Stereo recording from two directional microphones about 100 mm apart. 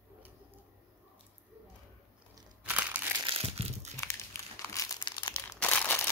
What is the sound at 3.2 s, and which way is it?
Crumpling, 80° right.